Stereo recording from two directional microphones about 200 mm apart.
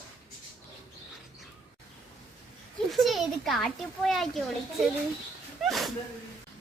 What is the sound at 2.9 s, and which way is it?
Speech, centre (ahead or behind).